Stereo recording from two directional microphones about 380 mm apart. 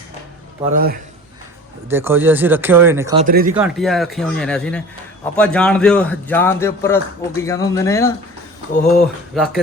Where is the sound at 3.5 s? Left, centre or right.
Centre.